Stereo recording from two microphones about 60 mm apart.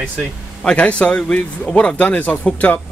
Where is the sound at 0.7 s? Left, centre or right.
Centre.